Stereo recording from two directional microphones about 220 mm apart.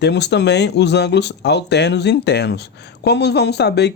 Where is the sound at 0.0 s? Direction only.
50° left (ahead or behind).